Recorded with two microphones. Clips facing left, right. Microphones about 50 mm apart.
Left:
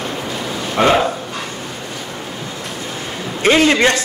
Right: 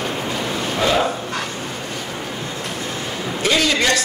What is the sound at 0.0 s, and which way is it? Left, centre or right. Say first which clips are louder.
Bow-wow: even; centre.